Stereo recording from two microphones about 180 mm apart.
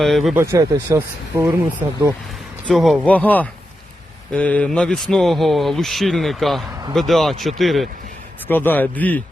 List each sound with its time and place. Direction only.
0.0 s speech: centre (ahead or behind)
0.3 s speech: 15° right (ahead or behind)
2.6 s speech: centre (ahead or behind)
8.4 s speech: 10° left (ahead or behind)